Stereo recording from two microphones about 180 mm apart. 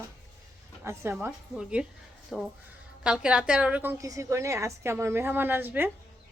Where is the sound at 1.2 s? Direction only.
5° right (ahead or behind).